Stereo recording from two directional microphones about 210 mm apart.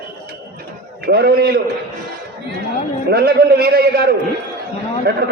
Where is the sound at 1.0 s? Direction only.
50° right (ahead or behind).